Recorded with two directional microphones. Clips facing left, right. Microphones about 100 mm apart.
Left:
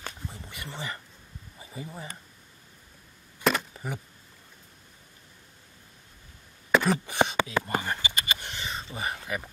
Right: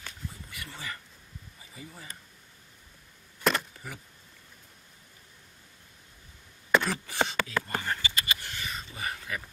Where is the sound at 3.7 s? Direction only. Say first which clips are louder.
Left 7 dB; 30° left (ahead or behind).